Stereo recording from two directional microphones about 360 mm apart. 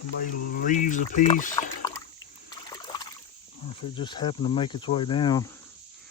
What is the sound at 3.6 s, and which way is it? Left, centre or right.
Speech, centre.